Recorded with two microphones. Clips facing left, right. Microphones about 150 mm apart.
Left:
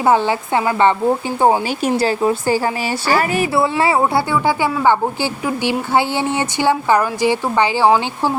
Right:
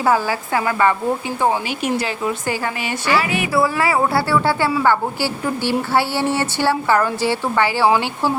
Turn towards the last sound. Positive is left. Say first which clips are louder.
# left 2 dB
turn(degrees=15)  # may be behind; listen again after turning